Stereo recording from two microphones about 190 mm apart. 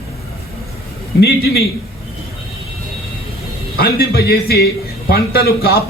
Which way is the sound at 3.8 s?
55° left (ahead or behind).